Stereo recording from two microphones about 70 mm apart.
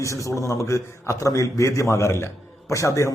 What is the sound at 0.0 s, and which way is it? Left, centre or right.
A man's voice, left.